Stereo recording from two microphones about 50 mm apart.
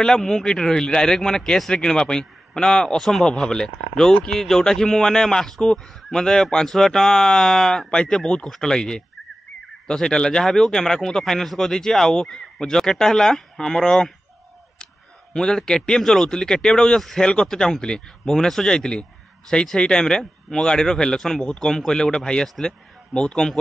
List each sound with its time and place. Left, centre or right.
0.0 s speech: centre
15.3 s speech: centre